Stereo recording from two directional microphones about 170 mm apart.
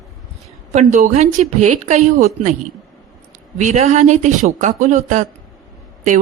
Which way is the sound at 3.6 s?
45° right (ahead or behind).